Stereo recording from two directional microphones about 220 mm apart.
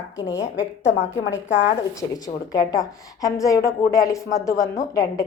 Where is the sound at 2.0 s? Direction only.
15° left (ahead or behind).